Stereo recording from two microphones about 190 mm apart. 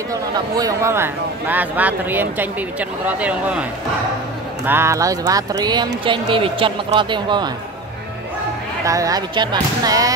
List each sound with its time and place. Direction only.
0.1 s speech: 20° right (ahead or behind)
4.6 s speech: 15° right (ahead or behind)
8.8 s speech: 20° right (ahead or behind)